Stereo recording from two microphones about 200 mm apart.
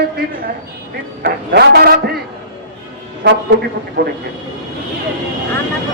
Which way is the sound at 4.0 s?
60° right (ahead or behind).